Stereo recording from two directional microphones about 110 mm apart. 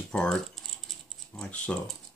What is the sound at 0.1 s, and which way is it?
Rattle, 5° left (ahead or behind).